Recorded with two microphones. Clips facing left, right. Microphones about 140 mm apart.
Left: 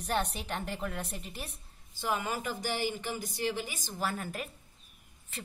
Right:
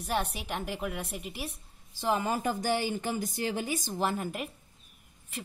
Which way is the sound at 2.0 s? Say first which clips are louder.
Right 4 dB; 30° right (ahead or behind).